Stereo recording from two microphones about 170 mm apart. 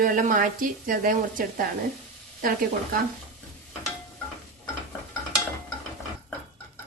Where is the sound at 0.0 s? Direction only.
50° right (ahead or behind).